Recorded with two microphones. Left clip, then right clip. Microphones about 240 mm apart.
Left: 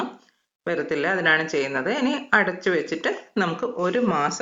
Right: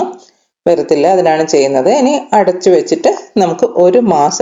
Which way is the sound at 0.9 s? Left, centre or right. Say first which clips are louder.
Right 9 dB; centre.